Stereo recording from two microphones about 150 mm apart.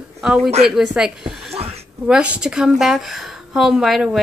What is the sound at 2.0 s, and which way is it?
A woman's voice, 10° right (ahead or behind).